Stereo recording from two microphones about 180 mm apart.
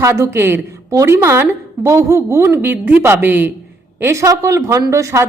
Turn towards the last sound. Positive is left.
turn(degrees=-15)  # may be behind; listen again after turning